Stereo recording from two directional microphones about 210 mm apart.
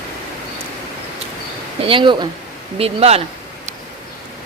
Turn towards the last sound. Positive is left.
turn(degrees=-30)  # may be behind; listen again after turning